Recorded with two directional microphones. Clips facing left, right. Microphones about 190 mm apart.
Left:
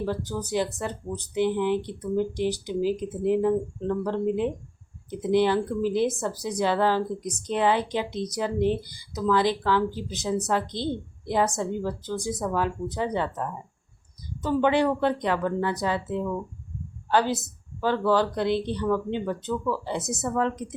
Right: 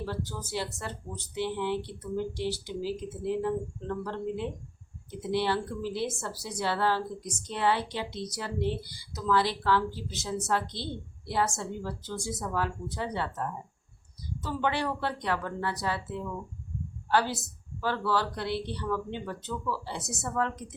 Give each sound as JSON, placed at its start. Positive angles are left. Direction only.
{"t": 0.0, "sound": "speech", "side_deg": 15}
{"t": 14.4, "sound": "a woman's voice", "side_deg": 20}